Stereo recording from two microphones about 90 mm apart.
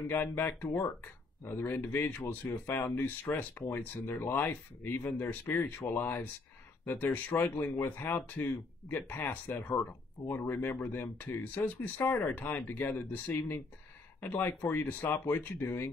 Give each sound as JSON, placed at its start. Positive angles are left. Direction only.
{"t": 0.1, "sound": "speech", "side_deg": 20}
{"t": 13.3, "sound": "speech", "side_deg": 30}